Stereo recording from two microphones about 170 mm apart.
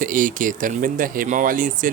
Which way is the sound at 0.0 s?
50° right (ahead or behind).